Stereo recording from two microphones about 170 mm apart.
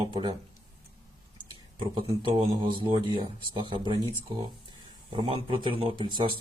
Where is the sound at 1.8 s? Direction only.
30° right (ahead or behind).